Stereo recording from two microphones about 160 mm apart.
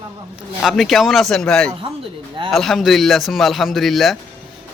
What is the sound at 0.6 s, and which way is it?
A man's voice, centre (ahead or behind).